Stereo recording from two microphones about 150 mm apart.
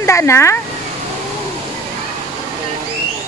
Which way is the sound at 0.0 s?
20° left (ahead or behind).